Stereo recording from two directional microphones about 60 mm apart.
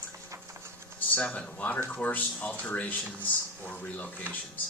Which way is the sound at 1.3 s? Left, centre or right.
Left.